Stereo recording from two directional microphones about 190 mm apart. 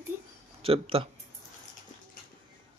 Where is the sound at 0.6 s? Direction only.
30° right (ahead or behind).